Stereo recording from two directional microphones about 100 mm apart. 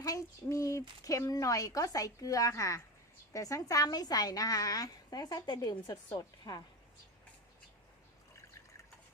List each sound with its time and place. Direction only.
0.0 s a woman's voice: 35° left (ahead or behind)